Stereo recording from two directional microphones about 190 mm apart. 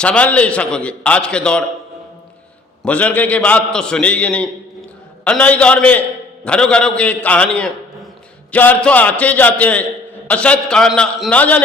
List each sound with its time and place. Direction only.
0.0 s a man's voice: 5° left (ahead or behind)
2.8 s a man's voice: 5° left (ahead or behind)